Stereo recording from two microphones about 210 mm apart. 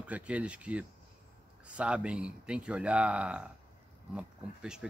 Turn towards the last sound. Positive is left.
turn(degrees=-5)  # may be behind; listen again after turning